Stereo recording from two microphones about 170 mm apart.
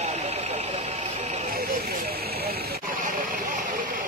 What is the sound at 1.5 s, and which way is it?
Vehicle, 65° right (ahead or behind).